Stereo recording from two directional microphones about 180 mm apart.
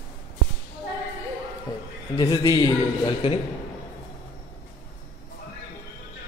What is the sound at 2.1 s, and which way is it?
Speech, 20° left (ahead or behind).